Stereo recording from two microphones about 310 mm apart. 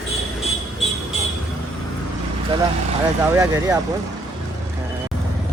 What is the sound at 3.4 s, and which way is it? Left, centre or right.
Speech, centre.